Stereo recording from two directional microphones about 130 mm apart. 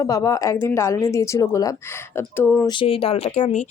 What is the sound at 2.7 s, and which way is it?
Speech, 40° left (ahead or behind).